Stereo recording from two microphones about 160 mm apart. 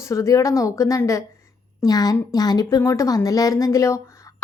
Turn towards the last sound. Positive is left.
turn(degrees=20)  # may be behind; listen again after turning